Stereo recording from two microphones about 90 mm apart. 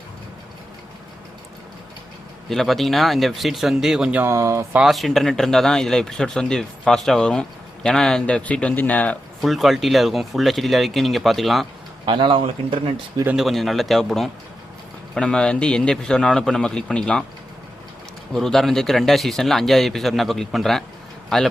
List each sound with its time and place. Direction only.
2.5 s speech: centre (ahead or behind)
4.2 s speech: 30° right (ahead or behind)
4.8 s a man's voice: centre (ahead or behind); by 9.1 s 15° left (ahead or behind)
9.4 s speech: centre (ahead or behind)
12.0 s speech: 60° right (ahead or behind)
13.3 s a man's voice: centre (ahead or behind)
18.3 s speech: 5° left (ahead or behind)